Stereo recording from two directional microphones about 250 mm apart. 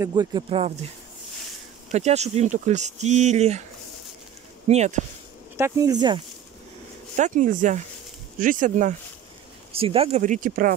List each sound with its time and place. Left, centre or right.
0.0 s speech: centre
1.9 s speech: right
4.6 s speech: right
5.6 s speech: centre
7.2 s speech: right